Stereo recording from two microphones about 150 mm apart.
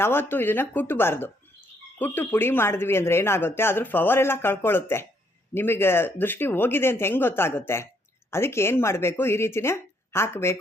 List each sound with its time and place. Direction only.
0.0 s speech: 15° left (ahead or behind)